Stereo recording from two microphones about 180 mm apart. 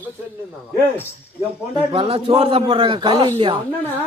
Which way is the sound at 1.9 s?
30° right (ahead or behind).